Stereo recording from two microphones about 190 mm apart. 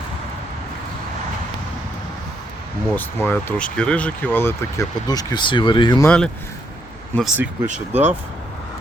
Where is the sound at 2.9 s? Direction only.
10° left (ahead or behind).